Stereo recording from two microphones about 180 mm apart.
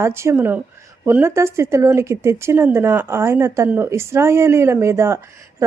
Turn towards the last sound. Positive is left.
turn(degrees=-15)  # may be behind; listen again after turning